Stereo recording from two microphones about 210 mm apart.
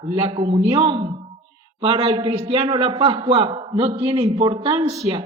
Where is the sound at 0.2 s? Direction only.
25° right (ahead or behind).